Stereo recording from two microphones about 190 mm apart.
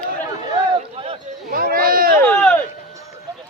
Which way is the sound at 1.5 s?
50° right (ahead or behind).